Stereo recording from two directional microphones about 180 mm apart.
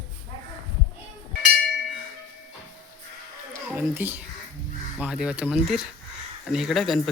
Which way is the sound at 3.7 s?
10° right (ahead or behind).